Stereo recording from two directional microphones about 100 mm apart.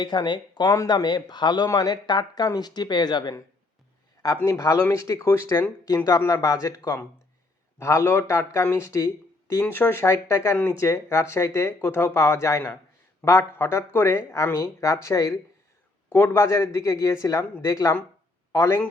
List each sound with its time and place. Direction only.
0.0 s speech: 50° left (ahead or behind)
4.4 s speech: 35° left (ahead or behind)